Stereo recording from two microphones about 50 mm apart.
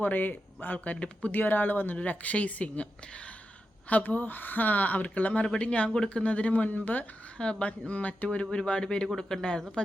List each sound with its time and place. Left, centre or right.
0.0 s speech: left
0.9 s speech: left
1.3 s speech: left; by 9.6 s centre